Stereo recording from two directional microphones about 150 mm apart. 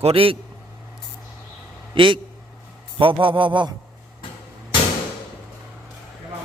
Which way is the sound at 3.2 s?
35° right (ahead or behind).